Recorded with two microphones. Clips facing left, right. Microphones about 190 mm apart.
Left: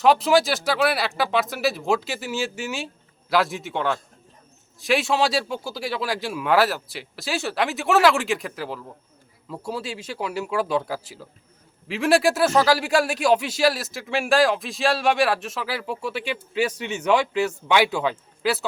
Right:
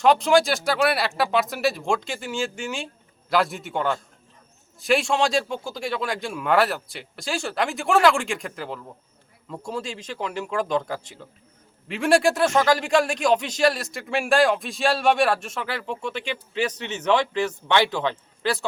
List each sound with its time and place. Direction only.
0.0 s a man's voice: 5° left (ahead or behind)